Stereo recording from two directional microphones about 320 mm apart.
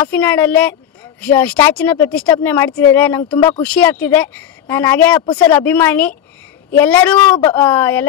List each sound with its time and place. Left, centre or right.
0.0 s speech: centre